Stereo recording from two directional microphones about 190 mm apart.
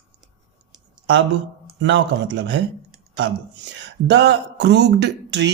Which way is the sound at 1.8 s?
75° right (ahead or behind).